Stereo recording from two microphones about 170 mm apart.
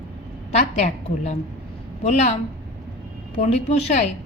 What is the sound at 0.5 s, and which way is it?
A woman's voice, 40° left (ahead or behind).